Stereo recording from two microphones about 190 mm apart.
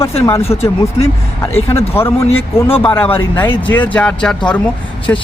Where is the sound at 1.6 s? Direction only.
30° left (ahead or behind).